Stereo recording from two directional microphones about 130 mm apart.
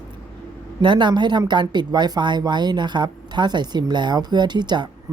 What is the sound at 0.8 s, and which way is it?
Speech, 35° right (ahead or behind).